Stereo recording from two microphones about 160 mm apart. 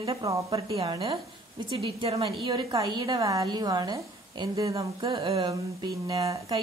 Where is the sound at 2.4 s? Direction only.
25° right (ahead or behind).